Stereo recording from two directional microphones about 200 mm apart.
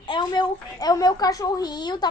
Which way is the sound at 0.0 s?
25° left (ahead or behind).